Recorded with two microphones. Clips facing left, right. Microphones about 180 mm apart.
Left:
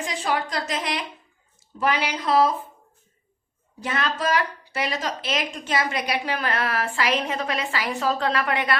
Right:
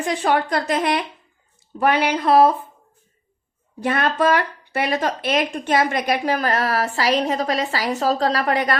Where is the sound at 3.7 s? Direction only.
60° right (ahead or behind); by 8.8 s 40° right (ahead or behind).